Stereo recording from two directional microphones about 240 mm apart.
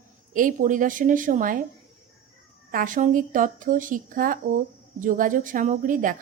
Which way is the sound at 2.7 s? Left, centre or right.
Right.